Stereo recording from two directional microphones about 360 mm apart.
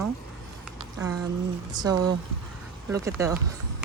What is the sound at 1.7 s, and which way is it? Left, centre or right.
Speech, centre.